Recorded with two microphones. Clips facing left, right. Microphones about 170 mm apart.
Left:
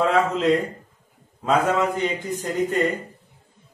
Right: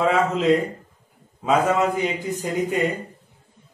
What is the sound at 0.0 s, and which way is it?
A man's voice, centre (ahead or behind).